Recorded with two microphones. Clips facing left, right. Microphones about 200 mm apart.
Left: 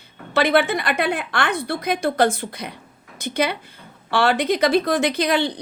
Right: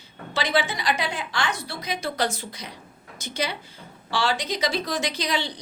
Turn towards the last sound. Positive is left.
turn(degrees=55)  # may be behind; listen again after turning